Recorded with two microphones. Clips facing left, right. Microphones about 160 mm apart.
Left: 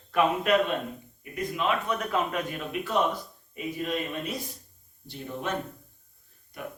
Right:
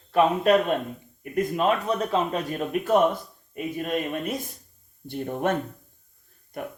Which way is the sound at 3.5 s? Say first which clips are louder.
Right 3 dB; 50° right (ahead or behind).